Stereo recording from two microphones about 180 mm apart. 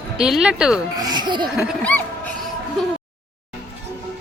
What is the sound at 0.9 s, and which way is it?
Music, 20° right (ahead or behind).